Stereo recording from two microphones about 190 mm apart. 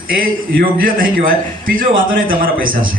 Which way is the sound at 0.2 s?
50° right (ahead or behind).